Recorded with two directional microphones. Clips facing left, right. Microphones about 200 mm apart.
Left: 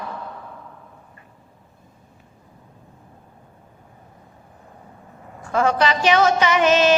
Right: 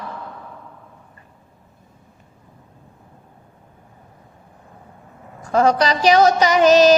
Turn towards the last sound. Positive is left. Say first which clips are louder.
# right 5 dB
turn(degrees=-40)  # may be behind; listen again after turning